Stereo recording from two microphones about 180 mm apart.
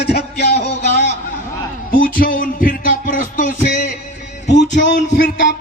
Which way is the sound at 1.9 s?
50° left (ahead or behind).